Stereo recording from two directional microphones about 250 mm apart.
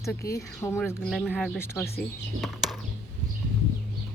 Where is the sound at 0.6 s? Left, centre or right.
Centre.